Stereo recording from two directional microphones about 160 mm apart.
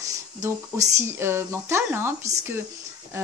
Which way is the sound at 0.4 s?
20° right (ahead or behind).